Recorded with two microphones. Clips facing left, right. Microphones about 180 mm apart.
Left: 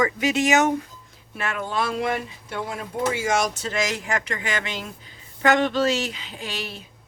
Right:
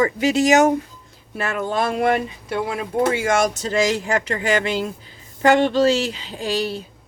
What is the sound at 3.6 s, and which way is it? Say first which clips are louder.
Speech: right 7 dB; 30° right (ahead or behind).